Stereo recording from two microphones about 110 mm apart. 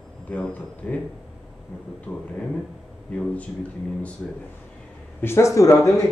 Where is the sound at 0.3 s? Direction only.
10° left (ahead or behind).